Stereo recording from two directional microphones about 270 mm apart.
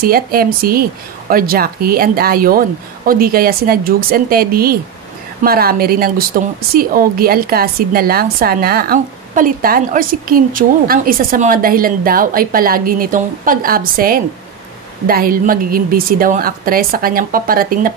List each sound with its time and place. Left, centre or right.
0.0 s a woman's voice: right